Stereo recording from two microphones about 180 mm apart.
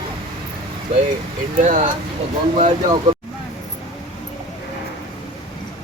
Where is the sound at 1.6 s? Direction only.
45° right (ahead or behind).